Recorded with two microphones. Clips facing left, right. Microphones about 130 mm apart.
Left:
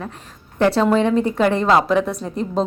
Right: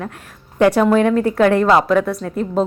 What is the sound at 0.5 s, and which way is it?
Speech, 10° right (ahead or behind).